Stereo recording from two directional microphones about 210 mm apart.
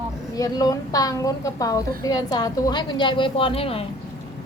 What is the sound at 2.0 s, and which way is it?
A woman's voice, 20° left (ahead or behind).